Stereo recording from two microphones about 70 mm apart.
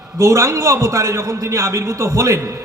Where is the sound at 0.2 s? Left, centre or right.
Right.